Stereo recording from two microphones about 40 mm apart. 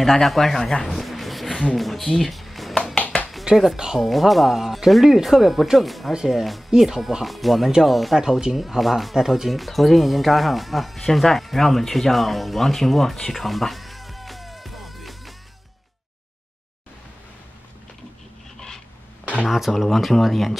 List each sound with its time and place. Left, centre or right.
0.0 s speech: centre
0.8 s a sound: centre
1.8 s speech: centre
3.7 s speech: centre
4.0 s speech: centre
8.2 s speech: centre
19.4 s speech: centre